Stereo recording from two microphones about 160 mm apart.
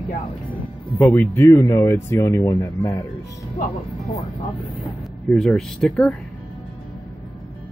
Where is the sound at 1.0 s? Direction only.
10° left (ahead or behind).